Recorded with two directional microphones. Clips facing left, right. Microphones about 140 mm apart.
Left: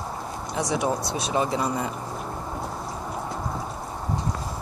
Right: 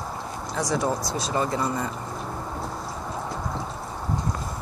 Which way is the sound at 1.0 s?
70° left (ahead or behind).